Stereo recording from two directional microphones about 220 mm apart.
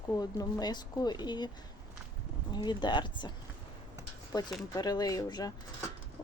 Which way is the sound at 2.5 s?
20° left (ahead or behind).